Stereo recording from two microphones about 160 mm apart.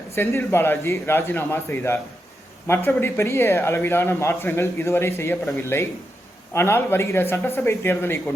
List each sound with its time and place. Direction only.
0.1 s a man's voice: 15° left (ahead or behind)